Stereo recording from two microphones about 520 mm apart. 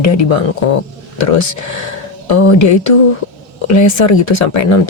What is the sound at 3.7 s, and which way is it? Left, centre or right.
Speech, left.